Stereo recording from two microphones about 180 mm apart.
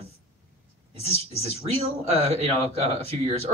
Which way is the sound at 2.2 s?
35° right (ahead or behind).